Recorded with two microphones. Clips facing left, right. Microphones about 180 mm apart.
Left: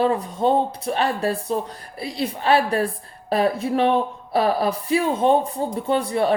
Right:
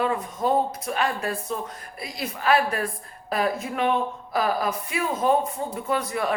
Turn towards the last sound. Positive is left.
turn(degrees=30)  # may be behind; listen again after turning